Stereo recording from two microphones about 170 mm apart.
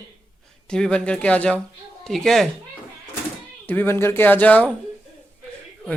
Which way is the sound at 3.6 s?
10° left (ahead or behind).